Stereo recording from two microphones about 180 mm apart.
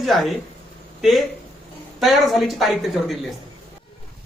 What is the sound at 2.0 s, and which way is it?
A woman's voice, centre (ahead or behind).